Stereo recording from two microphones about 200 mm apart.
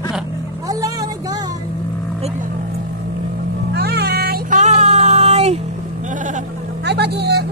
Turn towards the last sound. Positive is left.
turn(degrees=-55)  # may be behind; listen again after turning